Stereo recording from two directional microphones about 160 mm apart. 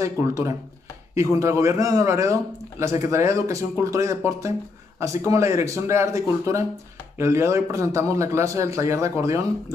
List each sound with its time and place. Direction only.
0.0 s a man's voice: 20° right (ahead or behind)